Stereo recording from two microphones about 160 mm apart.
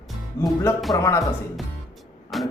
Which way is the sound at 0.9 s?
20° left (ahead or behind).